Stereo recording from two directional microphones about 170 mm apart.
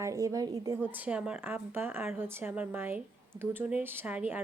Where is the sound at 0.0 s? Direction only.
20° right (ahead or behind).